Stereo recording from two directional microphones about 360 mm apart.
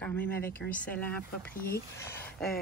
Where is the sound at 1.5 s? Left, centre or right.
Left.